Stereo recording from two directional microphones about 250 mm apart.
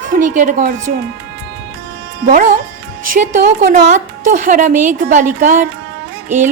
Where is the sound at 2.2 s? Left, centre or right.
Right.